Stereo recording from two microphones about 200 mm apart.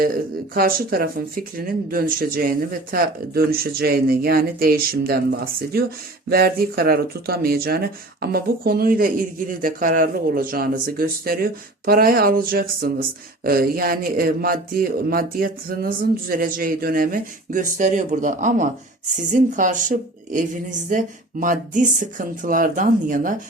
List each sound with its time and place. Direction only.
0.0 s a woman's voice: 45° right (ahead or behind)